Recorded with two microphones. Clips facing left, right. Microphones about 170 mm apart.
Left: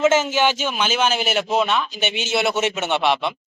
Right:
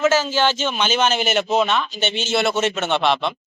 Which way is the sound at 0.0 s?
20° left (ahead or behind).